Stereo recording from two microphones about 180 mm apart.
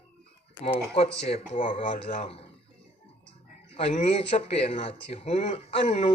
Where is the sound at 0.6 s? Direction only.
35° left (ahead or behind).